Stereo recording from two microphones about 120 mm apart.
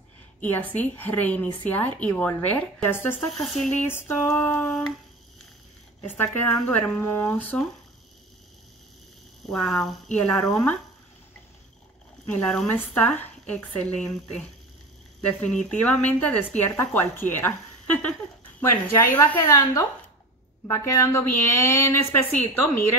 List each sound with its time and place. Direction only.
0.4 s a woman's voice: 15° left (ahead or behind)
3.3 s speech: centre (ahead or behind)
3.7 s a woman's voice: 15° left (ahead or behind)
6.0 s a woman's voice: 15° left (ahead or behind)
7.5 s speech: 5° left (ahead or behind)
9.5 s speech: 5° left (ahead or behind)
12.3 s a woman's voice: 10° left (ahead or behind)